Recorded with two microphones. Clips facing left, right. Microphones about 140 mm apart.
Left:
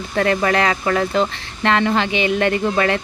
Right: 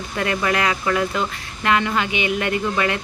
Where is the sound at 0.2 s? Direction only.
35° left (ahead or behind).